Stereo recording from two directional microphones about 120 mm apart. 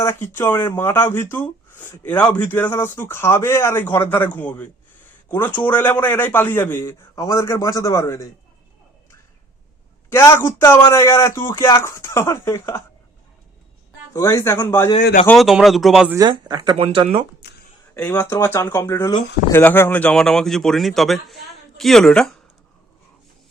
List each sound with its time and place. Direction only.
0.2 s speech: 20° left (ahead or behind)
10.1 s speech: 20° left (ahead or behind)
14.1 s speech: 25° left (ahead or behind)
15.4 s speech: centre (ahead or behind)
16.1 s speech: 35° right (ahead or behind)
16.7 s speech: 45° right (ahead or behind)
17.9 s speech: 15° left (ahead or behind)